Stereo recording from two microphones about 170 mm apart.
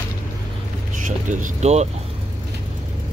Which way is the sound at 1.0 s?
45° right (ahead or behind).